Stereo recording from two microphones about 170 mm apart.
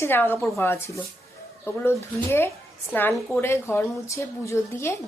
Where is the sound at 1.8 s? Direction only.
15° left (ahead or behind).